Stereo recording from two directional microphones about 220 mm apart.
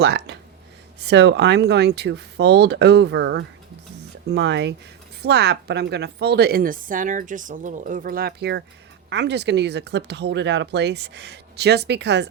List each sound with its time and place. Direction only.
0.0 s a woman's voice: 50° right (ahead or behind)